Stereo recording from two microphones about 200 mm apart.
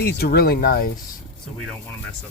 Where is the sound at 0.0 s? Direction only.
50° left (ahead or behind).